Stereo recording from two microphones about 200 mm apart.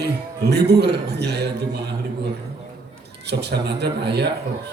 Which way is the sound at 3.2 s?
55° right (ahead or behind).